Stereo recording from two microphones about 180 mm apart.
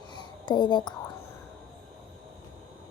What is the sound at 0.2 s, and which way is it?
Whispering, 25° left (ahead or behind).